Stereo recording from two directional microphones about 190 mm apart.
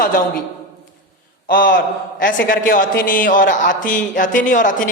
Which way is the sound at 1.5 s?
45° left (ahead or behind).